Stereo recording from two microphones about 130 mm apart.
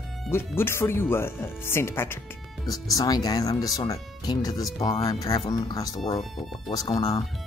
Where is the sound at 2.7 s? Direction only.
30° left (ahead or behind).